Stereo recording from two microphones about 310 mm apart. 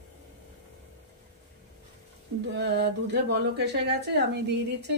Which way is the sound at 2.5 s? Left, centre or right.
Right.